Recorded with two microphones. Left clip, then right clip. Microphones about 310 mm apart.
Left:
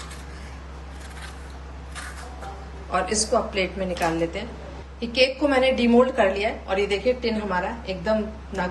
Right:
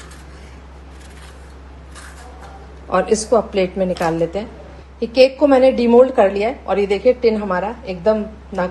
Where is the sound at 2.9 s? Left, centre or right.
Centre.